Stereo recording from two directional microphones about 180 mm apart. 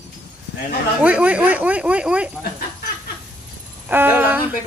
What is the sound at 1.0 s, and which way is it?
Speech, 10° right (ahead or behind).